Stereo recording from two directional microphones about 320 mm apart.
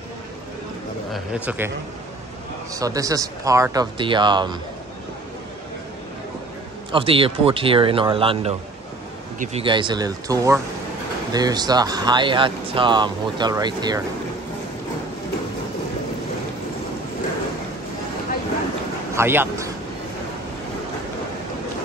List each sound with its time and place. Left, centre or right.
1.1 s speech: centre
2.7 s speech: centre
6.9 s speech: centre
19.1 s a man's voice: centre